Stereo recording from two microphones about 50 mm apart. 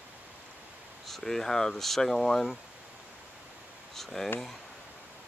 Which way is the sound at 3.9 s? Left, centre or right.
Centre.